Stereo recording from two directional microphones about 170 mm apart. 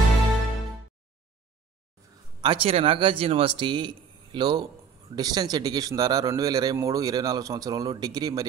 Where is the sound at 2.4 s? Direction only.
30° right (ahead or behind).